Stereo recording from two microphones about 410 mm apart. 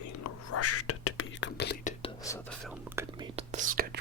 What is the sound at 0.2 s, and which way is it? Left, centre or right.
Whispering, left.